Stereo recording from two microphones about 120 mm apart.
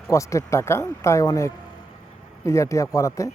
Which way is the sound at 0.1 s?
25° left (ahead or behind).